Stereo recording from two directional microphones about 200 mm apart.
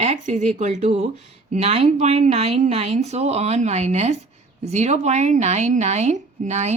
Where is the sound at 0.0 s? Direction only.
35° right (ahead or behind).